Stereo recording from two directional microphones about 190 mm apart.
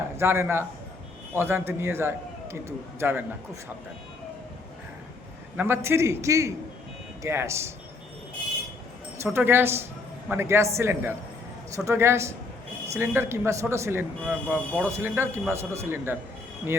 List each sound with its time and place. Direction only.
0.2 s a man's voice: 15° right (ahead or behind)
5.5 s a man's voice: 10° right (ahead or behind)
9.2 s a man's voice: 10° right (ahead or behind)